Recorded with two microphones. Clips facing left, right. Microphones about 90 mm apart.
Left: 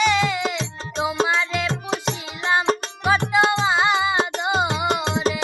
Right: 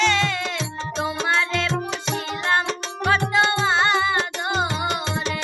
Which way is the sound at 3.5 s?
5° left (ahead or behind).